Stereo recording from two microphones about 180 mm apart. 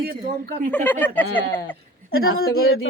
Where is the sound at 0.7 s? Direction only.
10° left (ahead or behind).